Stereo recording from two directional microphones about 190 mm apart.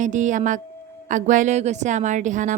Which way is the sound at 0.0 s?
40° right (ahead or behind).